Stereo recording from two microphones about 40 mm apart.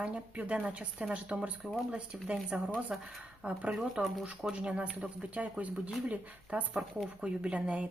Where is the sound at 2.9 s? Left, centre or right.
Centre.